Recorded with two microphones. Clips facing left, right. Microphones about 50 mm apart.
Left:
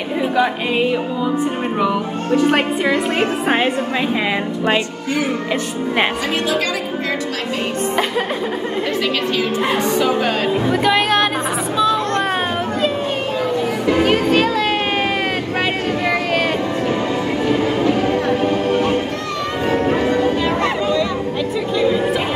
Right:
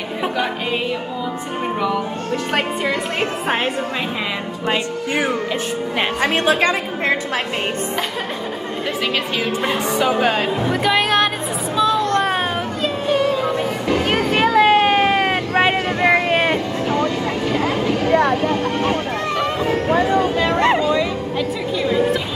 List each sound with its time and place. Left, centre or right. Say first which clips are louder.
1.8 s speech: left 3 dB; centre
6.4 s a woman's voice: right 4 dB; right
9.8 s speech: even; centre
11.7 s a sound: even; centre
14.1 s vehicle: even; right
21.7 s chatter: left 1 dB; centre